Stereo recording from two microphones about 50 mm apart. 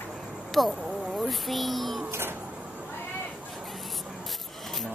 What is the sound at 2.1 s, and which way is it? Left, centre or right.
Music, right.